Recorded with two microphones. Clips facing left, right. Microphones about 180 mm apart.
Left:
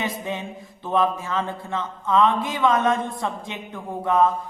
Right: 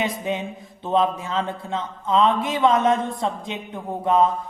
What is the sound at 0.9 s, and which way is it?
Speech, 20° right (ahead or behind).